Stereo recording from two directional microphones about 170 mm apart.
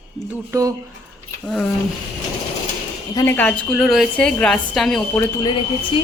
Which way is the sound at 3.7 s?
Centre (ahead or behind).